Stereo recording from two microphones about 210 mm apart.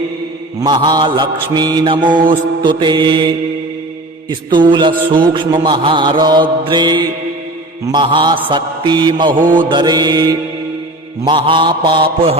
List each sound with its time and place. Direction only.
0.6 s mantra: 20° right (ahead or behind)
9.4 s mantra: 40° right (ahead or behind)
9.6 s mantra: 20° right (ahead or behind)